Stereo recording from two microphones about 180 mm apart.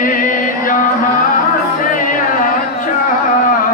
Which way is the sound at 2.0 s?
45° left (ahead or behind).